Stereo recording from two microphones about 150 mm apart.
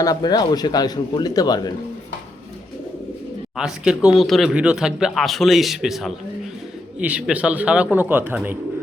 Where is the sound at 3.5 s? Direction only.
5° right (ahead or behind).